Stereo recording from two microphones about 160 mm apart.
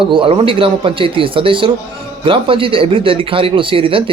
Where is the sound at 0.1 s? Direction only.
30° right (ahead or behind).